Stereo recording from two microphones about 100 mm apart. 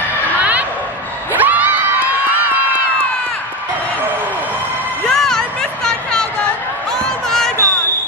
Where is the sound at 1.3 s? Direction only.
15° right (ahead or behind).